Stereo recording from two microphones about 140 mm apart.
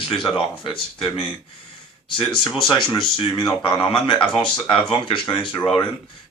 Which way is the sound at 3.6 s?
35° left (ahead or behind).